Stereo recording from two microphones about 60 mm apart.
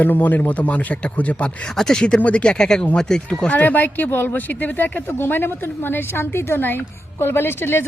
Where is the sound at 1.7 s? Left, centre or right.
Centre.